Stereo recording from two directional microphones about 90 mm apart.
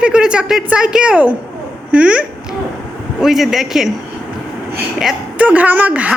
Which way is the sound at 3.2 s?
5° right (ahead or behind).